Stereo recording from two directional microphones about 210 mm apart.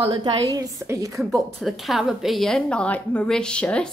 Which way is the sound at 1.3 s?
Centre (ahead or behind).